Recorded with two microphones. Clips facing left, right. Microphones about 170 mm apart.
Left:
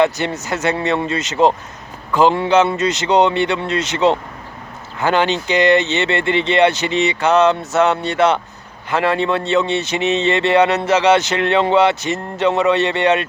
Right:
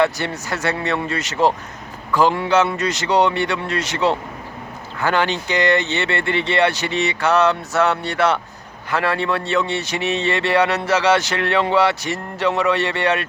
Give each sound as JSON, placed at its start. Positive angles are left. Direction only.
{"t": 0.0, "sound": "speech", "side_deg": 20}